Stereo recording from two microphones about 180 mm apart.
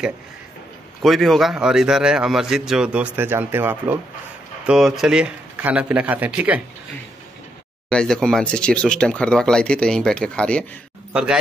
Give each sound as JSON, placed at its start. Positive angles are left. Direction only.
{"t": 1.0, "sound": "speech", "side_deg": 0}
{"t": 7.9, "sound": "speech", "side_deg": 5}